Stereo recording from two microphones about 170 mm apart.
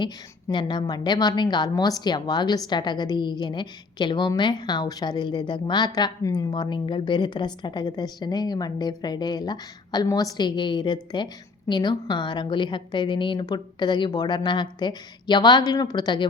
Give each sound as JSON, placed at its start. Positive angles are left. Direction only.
{"t": 0.5, "sound": "a woman's voice", "side_deg": 25}